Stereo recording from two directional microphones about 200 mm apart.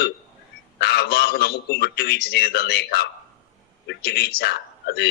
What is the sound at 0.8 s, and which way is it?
A man's voice, 55° left (ahead or behind).